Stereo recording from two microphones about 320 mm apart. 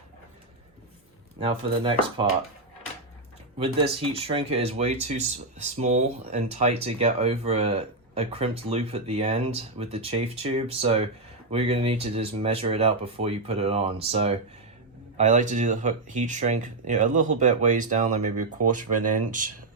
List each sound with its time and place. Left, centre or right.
1.4 s speech: centre
3.6 s speech: centre
18.9 s speech: right
19.2 s speech: right